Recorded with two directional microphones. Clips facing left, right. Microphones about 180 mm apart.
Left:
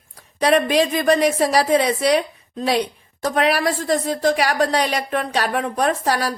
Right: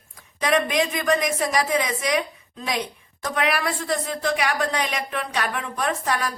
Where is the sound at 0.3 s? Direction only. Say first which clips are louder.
Left 5 dB; 35° left (ahead or behind).